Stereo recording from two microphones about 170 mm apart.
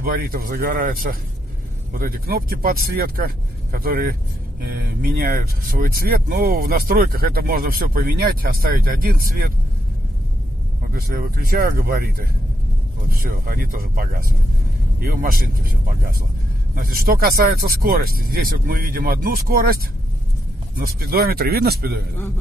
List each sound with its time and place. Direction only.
0.0 s speech: 60° right (ahead or behind)
10.9 s speech: 60° right (ahead or behind)
13.1 s speech: 55° right (ahead or behind)
16.7 s speech: 60° right (ahead or behind)
20.8 s speech: 60° right (ahead or behind)